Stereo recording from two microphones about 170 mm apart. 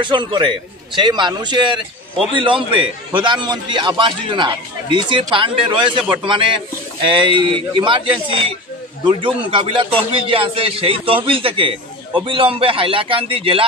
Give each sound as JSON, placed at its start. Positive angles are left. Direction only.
{"t": 0.0, "sound": "a man's voice", "side_deg": -25}
{"t": 9.0, "sound": "a man's voice", "side_deg": -30}